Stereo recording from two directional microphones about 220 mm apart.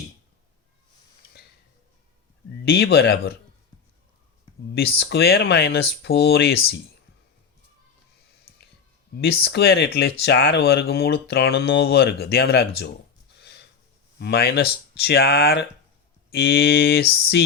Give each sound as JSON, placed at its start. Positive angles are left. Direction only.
{"t": 2.6, "sound": "speech", "side_deg": 45}
{"t": 4.9, "sound": "speech", "side_deg": 50}
{"t": 9.4, "sound": "speech", "side_deg": 50}
{"t": 14.2, "sound": "speech", "side_deg": 45}